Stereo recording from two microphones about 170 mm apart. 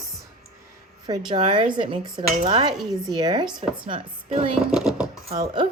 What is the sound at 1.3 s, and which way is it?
A woman's voice, 30° right (ahead or behind).